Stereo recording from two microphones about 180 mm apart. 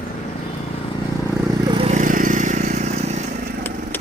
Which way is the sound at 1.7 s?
35° right (ahead or behind).